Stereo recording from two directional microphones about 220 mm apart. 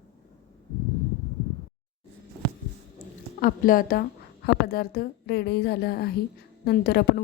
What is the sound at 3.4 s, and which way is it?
A woman's voice, 40° left (ahead or behind).